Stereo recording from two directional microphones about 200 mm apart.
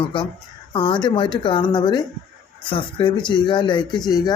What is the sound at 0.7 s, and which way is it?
Speech, 25° left (ahead or behind).